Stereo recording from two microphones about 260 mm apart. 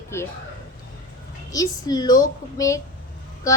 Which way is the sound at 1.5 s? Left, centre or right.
Centre.